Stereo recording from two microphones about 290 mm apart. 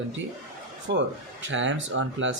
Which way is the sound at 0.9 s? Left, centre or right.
Right.